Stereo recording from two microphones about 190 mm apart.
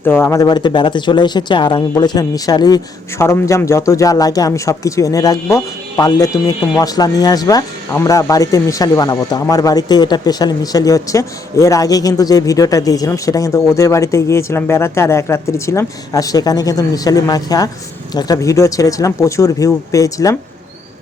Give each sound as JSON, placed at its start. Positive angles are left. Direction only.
{"t": 0.0, "sound": "speech", "side_deg": 10}